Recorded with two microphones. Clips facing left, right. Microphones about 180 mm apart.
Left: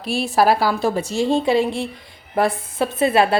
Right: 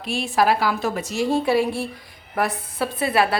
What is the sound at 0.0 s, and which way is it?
A woman's voice, 35° left (ahead or behind).